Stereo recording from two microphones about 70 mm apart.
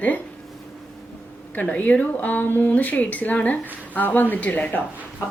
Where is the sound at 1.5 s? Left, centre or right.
Left.